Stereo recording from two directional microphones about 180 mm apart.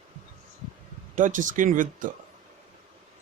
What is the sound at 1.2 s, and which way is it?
Speech, 45° right (ahead or behind).